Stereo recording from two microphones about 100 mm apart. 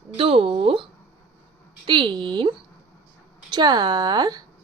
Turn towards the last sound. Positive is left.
turn(degrees=-45)  # may be behind; listen again after turning